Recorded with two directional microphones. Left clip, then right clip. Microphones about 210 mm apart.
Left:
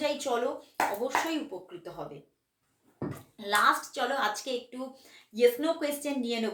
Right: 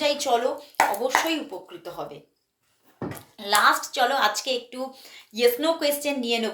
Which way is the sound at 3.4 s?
5° left (ahead or behind).